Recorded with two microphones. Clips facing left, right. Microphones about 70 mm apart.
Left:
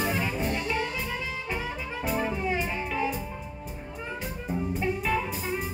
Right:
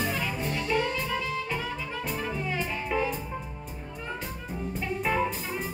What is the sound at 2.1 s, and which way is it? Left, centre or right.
Music, centre.